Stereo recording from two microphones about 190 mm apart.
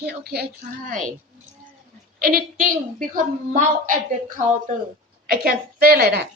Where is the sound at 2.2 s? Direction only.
50° right (ahead or behind).